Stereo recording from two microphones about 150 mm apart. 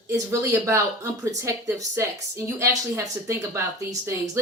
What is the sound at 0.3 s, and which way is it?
Speech, 20° right (ahead or behind).